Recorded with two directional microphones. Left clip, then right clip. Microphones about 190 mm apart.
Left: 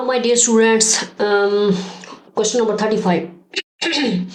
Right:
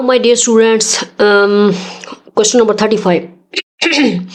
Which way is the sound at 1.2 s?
45° right (ahead or behind).